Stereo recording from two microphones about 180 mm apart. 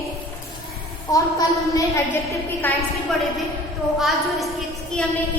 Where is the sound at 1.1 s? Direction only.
20° left (ahead or behind).